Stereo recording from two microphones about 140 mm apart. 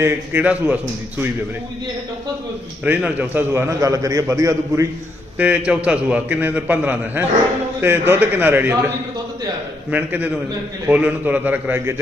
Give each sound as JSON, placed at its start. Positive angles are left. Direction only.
{"t": 0.0, "sound": "a man's voice", "side_deg": -10}
{"t": 2.8, "sound": "a man's voice", "side_deg": -10}
{"t": 5.4, "sound": "a man's voice", "side_deg": -10}
{"t": 9.9, "sound": "a man's voice", "side_deg": -10}